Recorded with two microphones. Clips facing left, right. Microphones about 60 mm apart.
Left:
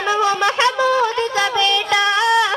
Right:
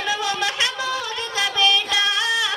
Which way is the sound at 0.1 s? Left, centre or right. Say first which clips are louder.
Left 8 dB; left.